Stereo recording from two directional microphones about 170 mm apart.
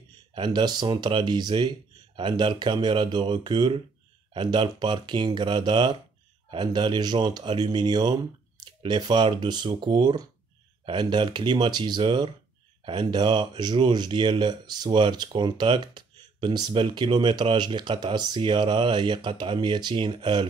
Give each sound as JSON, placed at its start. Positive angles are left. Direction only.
{"t": 0.3, "sound": "speech", "side_deg": -25}